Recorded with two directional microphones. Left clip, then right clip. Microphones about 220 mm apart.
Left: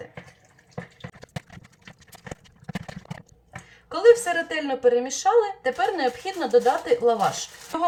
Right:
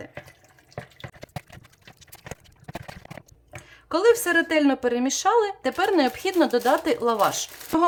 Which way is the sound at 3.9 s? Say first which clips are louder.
Left 2 dB; 55° right (ahead or behind).